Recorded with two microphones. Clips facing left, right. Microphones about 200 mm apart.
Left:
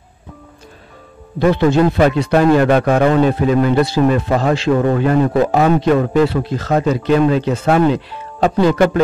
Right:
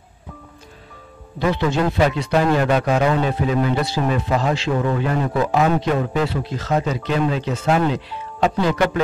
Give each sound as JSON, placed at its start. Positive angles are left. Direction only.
{"t": 1.4, "sound": "speech", "side_deg": 50}
{"t": 8.4, "sound": "speech", "side_deg": 45}